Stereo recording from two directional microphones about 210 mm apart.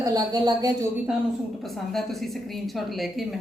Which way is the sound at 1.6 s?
Centre (ahead or behind).